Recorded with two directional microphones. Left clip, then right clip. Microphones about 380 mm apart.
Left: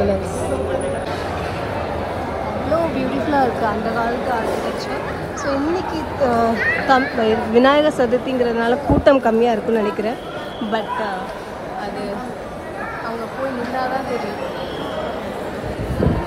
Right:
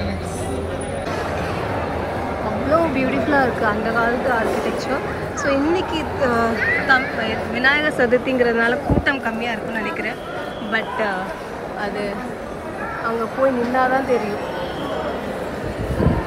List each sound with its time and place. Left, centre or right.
2.7 s vehicle: centre
5.4 s speech: centre